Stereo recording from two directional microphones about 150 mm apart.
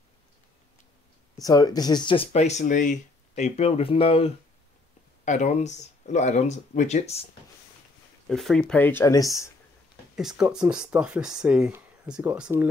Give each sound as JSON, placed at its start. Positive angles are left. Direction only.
{"t": 1.4, "sound": "speech", "side_deg": 25}
{"t": 2.6, "sound": "speech", "side_deg": 55}
{"t": 5.2, "sound": "speech", "side_deg": 55}
{"t": 8.3, "sound": "speech", "side_deg": 0}
{"t": 10.1, "sound": "speech", "side_deg": -5}